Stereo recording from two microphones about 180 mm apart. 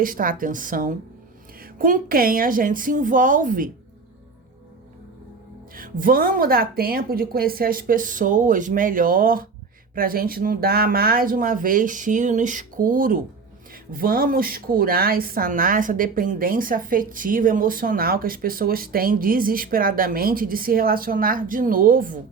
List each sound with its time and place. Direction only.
0.0 s a woman's voice: 50° right (ahead or behind)
5.7 s a woman's voice: 50° right (ahead or behind)